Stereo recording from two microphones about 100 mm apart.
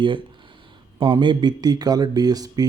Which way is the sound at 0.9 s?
55° right (ahead or behind).